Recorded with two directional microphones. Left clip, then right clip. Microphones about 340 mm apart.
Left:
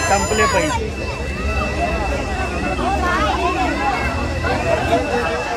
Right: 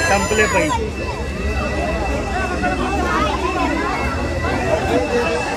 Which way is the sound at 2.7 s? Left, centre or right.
Centre.